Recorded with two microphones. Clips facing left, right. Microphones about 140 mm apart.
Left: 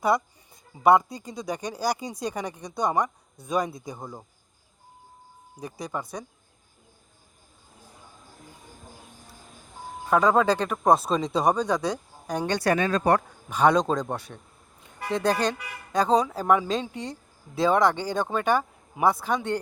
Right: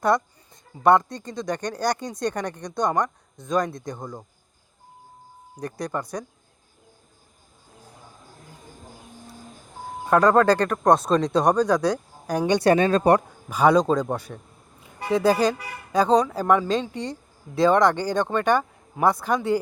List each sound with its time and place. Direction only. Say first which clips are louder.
0.0 s speech: right 2 dB; 5° left (ahead or behind)
5.5 s speech: right 4 dB; 5° left (ahead or behind)
10.1 s speech: right 4 dB; centre (ahead or behind)
12.5 s speech: right 6 dB; 25° right (ahead or behind)
13.5 s a man's voice: right 3 dB; centre (ahead or behind)